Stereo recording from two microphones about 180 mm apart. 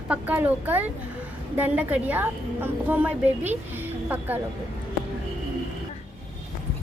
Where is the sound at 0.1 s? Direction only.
10° right (ahead or behind).